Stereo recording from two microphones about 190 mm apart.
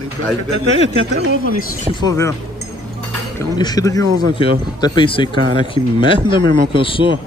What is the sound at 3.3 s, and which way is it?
Speech, 20° left (ahead or behind).